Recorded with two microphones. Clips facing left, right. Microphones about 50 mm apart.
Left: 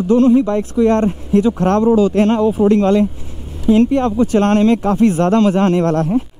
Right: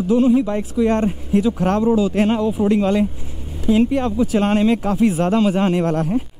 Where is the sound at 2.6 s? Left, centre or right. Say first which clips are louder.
Left 4 dB; centre.